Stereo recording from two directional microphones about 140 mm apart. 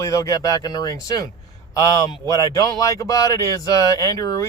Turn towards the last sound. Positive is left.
turn(degrees=25)  # may be behind; listen again after turning